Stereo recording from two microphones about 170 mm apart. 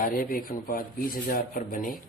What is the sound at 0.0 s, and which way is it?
Speech, 55° left (ahead or behind).